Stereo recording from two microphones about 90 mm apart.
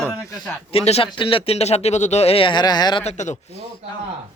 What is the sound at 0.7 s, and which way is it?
Speech, 90° left.